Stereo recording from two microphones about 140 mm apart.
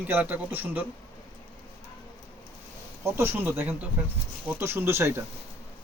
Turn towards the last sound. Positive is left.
turn(degrees=-15)  # may be behind; listen again after turning